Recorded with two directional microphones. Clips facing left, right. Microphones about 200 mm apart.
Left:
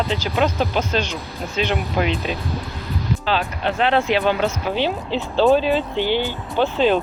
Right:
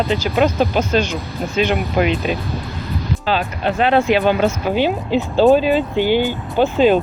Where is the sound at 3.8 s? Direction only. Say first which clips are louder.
Right 4 dB; 10° right (ahead or behind).